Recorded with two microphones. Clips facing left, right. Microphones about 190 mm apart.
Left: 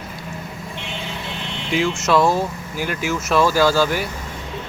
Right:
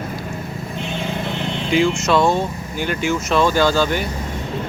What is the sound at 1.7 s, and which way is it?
Speech, 5° left (ahead or behind).